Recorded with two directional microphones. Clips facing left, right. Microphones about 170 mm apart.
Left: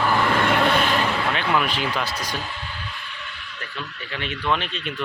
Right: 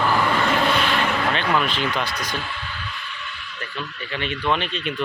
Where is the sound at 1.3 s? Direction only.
5° left (ahead or behind).